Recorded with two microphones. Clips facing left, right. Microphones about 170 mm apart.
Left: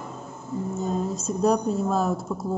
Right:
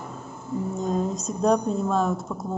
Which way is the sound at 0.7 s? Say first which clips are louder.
Right 1 dB; 5° left (ahead or behind).